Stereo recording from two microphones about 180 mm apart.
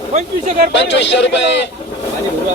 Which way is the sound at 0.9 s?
75° left (ahead or behind).